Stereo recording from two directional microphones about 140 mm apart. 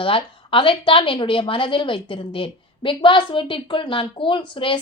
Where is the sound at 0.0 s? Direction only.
40° left (ahead or behind).